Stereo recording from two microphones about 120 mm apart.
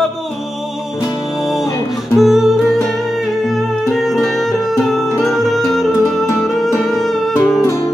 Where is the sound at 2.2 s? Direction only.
5° right (ahead or behind).